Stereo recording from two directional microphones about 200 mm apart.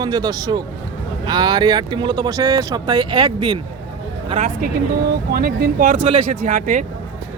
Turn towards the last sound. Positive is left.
turn(degrees=-40)  # may be behind; listen again after turning